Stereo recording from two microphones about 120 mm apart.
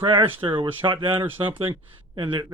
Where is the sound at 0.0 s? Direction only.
45° right (ahead or behind).